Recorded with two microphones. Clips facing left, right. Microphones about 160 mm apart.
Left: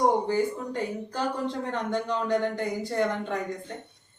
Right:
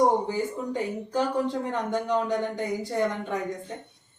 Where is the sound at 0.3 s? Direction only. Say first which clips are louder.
Left 2 dB; 15° right (ahead or behind).